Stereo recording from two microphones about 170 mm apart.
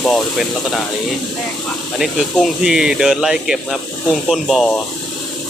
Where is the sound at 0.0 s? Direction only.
Centre (ahead or behind).